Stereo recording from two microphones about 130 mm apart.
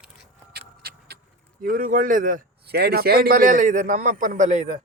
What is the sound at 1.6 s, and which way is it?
A man's voice, 90° right.